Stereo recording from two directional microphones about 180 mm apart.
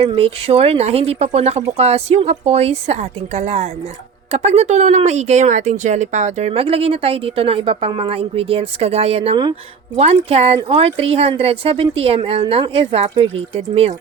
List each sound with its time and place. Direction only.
0.0 s speech: 30° right (ahead or behind)